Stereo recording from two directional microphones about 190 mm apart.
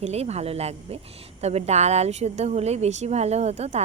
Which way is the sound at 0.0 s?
35° right (ahead or behind).